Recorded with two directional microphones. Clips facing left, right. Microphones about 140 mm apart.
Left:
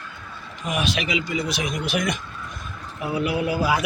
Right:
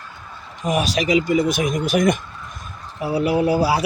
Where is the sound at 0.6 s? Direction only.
40° right (ahead or behind).